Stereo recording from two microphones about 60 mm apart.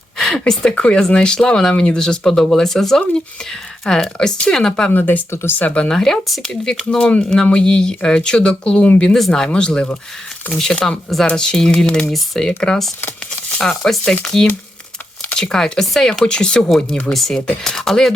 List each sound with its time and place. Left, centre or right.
0.2 s speech: centre
4.9 s speech: left
5.3 s speech: left
5.5 s speech: left
5.9 s speech: centre
15.2 s speech: centre